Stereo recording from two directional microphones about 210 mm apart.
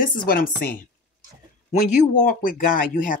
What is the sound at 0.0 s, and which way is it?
A woman's voice, 40° left (ahead or behind).